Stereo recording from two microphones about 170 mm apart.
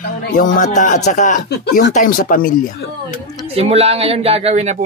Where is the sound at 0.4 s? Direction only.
50° left (ahead or behind).